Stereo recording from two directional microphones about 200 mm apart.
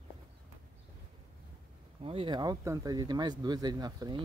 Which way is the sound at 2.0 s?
25° right (ahead or behind).